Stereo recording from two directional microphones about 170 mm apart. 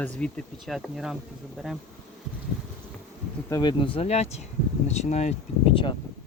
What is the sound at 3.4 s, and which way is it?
Speech, 25° left (ahead or behind).